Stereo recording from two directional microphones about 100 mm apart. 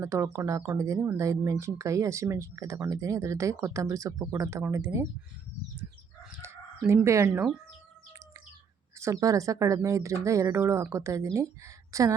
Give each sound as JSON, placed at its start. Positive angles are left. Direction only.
{"t": 0.0, "sound": "speech", "side_deg": -30}
{"t": 6.4, "sound": "chicken", "side_deg": -25}
{"t": 9.0, "sound": "speech", "side_deg": -30}